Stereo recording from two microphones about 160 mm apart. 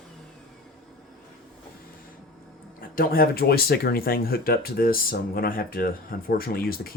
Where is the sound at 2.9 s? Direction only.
65° left (ahead or behind).